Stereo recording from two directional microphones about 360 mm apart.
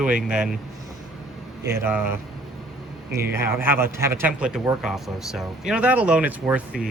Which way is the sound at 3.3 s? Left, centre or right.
Centre.